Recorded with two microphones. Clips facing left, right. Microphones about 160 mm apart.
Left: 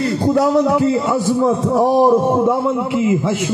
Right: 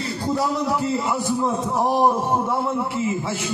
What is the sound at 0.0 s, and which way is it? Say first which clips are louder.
A man's voice: left 9 dB; 65° left (ahead or behind).